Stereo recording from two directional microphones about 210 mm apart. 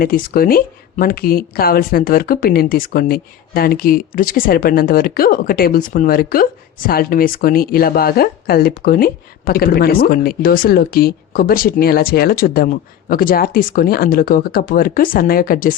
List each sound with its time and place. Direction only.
0.0 s speech: 45° left (ahead or behind)